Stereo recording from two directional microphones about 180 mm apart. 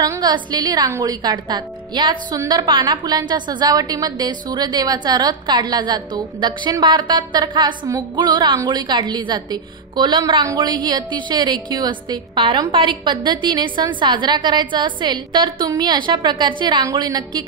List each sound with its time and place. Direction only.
0.0 s a woman's voice: 20° right (ahead or behind)